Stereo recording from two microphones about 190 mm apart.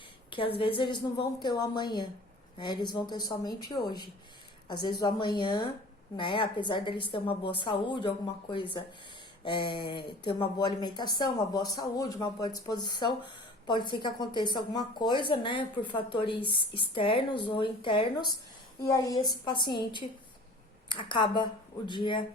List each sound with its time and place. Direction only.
0.3 s speech: 25° left (ahead or behind)